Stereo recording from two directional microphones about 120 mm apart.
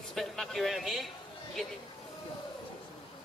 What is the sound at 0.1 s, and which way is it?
A man's voice, centre (ahead or behind).